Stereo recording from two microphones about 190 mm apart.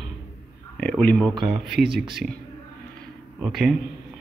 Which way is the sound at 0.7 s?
5° left (ahead or behind).